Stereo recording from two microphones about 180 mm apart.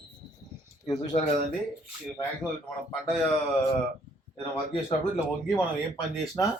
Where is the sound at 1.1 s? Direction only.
45° left (ahead or behind).